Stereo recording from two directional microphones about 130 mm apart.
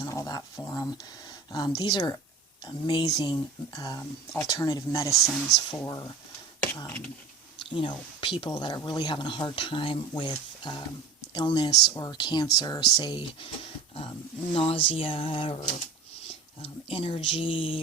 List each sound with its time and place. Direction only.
0.0 s a sound: 25° left (ahead or behind)
1.5 s speech: 35° left (ahead or behind)
5.1 s speech: centre (ahead or behind)
5.7 s speech: 25° left (ahead or behind)
7.6 s speech: 40° left (ahead or behind)
14.5 s speech: 45° left (ahead or behind)